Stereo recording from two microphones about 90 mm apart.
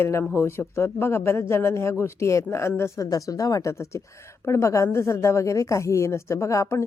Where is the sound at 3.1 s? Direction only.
40° left (ahead or behind).